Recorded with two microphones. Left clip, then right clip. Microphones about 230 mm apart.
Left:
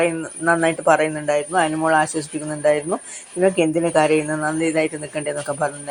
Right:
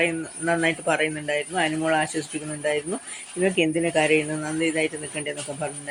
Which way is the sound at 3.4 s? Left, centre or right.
Centre.